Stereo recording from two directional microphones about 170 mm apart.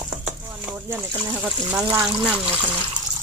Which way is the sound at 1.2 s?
10° right (ahead or behind).